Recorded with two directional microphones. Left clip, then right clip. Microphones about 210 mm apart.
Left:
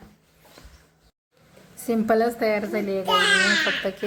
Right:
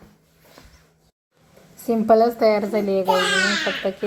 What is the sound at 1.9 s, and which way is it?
A child's voice, 10° right (ahead or behind).